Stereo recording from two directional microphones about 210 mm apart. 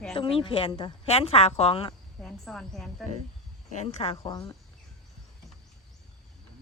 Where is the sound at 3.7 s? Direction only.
30° left (ahead or behind).